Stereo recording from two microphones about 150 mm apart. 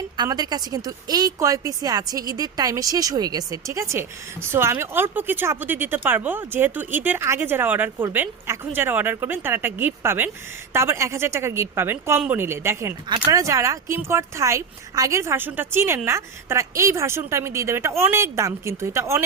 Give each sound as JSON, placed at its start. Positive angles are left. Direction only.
{"t": 0.2, "sound": "a woman's voice", "side_deg": -25}